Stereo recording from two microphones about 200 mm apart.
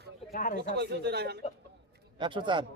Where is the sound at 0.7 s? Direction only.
55° right (ahead or behind).